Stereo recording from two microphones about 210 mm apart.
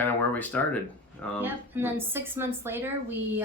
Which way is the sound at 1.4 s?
10° right (ahead or behind).